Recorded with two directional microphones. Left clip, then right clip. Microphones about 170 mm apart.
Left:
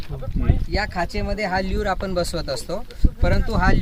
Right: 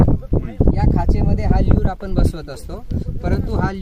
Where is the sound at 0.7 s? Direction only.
5° left (ahead or behind).